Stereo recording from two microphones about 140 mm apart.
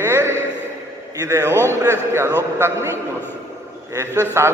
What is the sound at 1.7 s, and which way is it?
Mantra, 20° right (ahead or behind).